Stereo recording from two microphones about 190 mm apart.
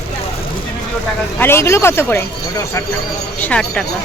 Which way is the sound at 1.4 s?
15° left (ahead or behind).